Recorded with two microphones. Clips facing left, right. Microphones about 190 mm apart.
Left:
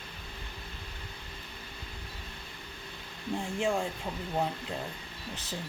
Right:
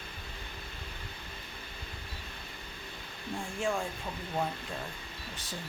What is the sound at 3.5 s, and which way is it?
Speech, 20° left (ahead or behind).